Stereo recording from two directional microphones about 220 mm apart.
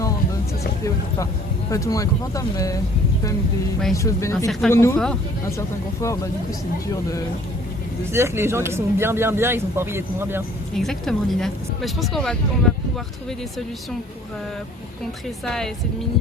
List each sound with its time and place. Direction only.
1.7 s speech: 15° left (ahead or behind)
3.9 s speech: 15° left (ahead or behind)
8.1 s speech: 10° right (ahead or behind)
10.8 s speech: centre (ahead or behind)
15.4 s speech: centre (ahead or behind)